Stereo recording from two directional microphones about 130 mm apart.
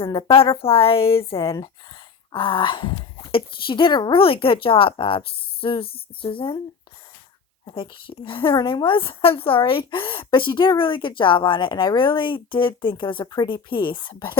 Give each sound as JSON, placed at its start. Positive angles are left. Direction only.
{"t": 0.4, "sound": "speech", "side_deg": 45}
{"t": 2.3, "sound": "a woman's voice", "side_deg": 40}
{"t": 7.7, "sound": "a woman's voice", "side_deg": 40}